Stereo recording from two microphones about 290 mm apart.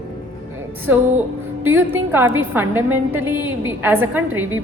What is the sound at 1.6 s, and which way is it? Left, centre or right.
A woman's voice, centre.